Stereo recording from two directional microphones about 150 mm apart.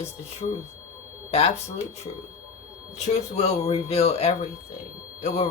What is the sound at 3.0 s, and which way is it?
Speech, 45° left (ahead or behind).